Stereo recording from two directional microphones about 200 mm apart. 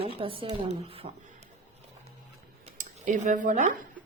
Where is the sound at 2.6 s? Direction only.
40° right (ahead or behind).